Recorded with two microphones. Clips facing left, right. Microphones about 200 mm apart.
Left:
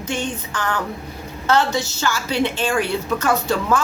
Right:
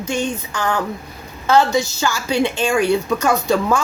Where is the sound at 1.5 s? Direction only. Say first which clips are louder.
Right 4 dB; 10° right (ahead or behind).